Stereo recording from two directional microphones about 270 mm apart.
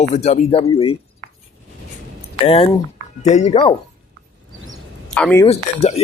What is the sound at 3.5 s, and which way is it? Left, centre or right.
Speech, centre.